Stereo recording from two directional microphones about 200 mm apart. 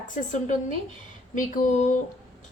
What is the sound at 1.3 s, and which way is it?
Speech, 40° left (ahead or behind).